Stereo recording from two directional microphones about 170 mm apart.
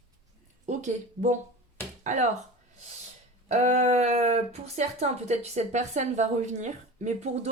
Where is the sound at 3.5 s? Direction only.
45° right (ahead or behind).